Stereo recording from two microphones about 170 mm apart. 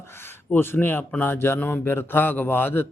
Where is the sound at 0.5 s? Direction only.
10° left (ahead or behind).